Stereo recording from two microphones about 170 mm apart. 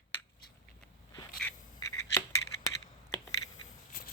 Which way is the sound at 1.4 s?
5° left (ahead or behind).